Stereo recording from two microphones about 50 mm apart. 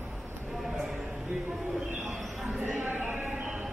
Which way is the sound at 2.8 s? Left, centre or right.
Right.